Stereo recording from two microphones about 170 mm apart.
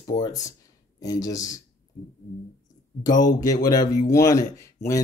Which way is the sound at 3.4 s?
20° left (ahead or behind).